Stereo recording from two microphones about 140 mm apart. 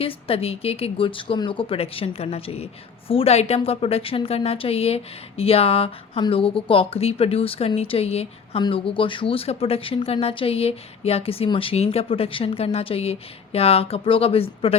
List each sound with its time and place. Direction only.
0.0 s speech: 45° left (ahead or behind)